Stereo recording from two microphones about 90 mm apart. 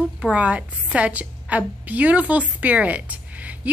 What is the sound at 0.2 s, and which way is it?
A woman's voice, 15° right (ahead or behind).